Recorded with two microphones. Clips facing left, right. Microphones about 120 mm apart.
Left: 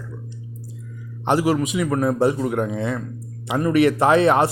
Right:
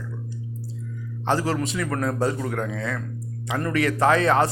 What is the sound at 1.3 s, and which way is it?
A man's voice, 15° left (ahead or behind).